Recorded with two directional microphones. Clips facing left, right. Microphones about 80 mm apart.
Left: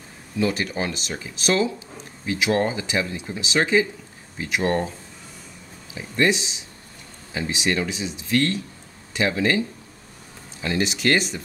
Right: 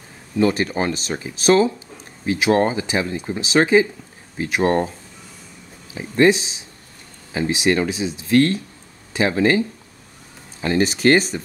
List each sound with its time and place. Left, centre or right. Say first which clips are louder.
0.4 s speech: right 5 dB; right
6.1 s speech: right 6 dB; right
10.6 s speech: right 6 dB; right